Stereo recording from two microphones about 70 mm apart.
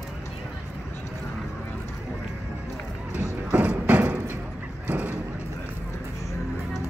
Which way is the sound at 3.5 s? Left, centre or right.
Right.